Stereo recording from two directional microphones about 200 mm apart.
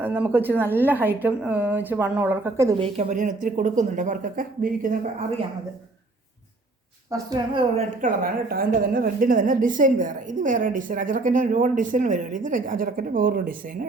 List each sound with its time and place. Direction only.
0.0 s a woman's voice: 10° right (ahead or behind)
2.8 s a woman's voice: 40° right (ahead or behind)
7.1 s a woman's voice: 20° right (ahead or behind)
8.0 s a woman's voice: 45° right (ahead or behind)